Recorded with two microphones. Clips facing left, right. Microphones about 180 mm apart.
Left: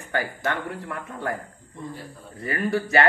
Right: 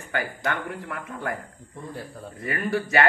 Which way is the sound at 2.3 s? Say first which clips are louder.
Left 2 dB; 35° left (ahead or behind).